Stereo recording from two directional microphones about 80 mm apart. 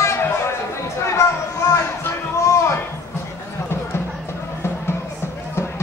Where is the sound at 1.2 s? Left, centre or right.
Left.